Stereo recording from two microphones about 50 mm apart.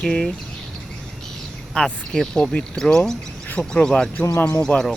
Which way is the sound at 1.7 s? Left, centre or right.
Centre.